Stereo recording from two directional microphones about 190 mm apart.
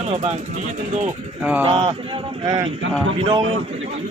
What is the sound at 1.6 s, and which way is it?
Speech, 30° right (ahead or behind).